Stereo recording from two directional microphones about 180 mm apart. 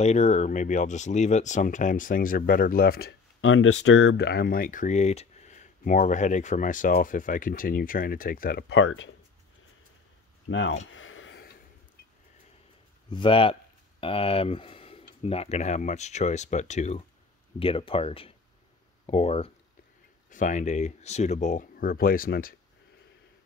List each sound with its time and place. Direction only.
0.0 s speech: 40° left (ahead or behind); by 9.1 s 85° left
10.5 s speech: 90° left
10.9 s a sound: 90° left
13.1 s speech: 30° left (ahead or behind)
20.2 s speech: 45° left (ahead or behind)